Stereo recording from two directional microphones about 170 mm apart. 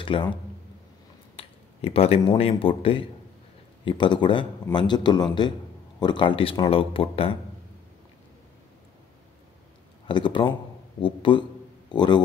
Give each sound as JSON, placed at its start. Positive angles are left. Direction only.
{"t": 0.0, "sound": "speech", "side_deg": 30}
{"t": 1.3, "sound": "a man's voice", "side_deg": 35}
{"t": 10.0, "sound": "a man's voice", "side_deg": 30}